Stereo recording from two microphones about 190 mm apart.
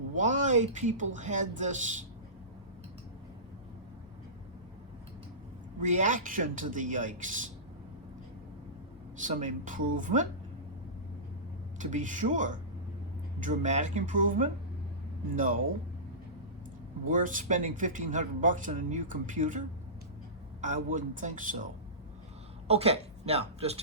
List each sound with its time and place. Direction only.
0.1 s speech: 40° right (ahead or behind)
5.8 s a man's voice: 40° right (ahead or behind)
9.1 s speech: 40° right (ahead or behind)
11.8 s speech: 40° right (ahead or behind)
17.1 s speech: 45° right (ahead or behind)
22.6 s speech: 30° right (ahead or behind)